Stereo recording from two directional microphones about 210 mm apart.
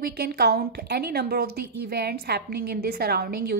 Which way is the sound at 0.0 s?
50° right (ahead or behind).